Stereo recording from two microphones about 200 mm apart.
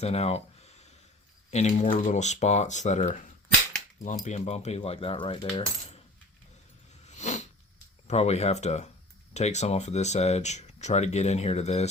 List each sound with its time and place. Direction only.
0.0 s a sound: 30° left (ahead or behind)
1.5 s speech: 35° left (ahead or behind)
7.1 s cat: 35° left (ahead or behind)
8.0 s speech: 35° left (ahead or behind)